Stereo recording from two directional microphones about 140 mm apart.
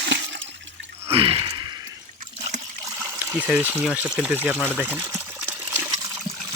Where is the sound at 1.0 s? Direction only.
40° right (ahead or behind).